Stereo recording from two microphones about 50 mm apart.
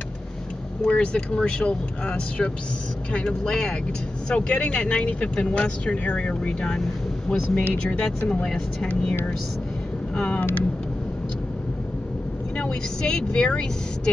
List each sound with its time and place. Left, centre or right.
0.8 s speech: left
7.5 s speech: left
8.3 s speech: centre
10.1 s speech: left
12.5 s speech: centre